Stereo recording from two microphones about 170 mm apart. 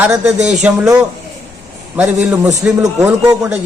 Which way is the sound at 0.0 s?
5° right (ahead or behind).